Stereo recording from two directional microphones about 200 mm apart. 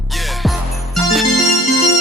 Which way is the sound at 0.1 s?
Centre (ahead or behind).